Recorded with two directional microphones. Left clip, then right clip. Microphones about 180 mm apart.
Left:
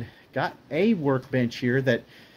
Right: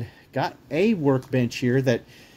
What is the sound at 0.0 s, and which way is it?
Speech, 20° right (ahead or behind).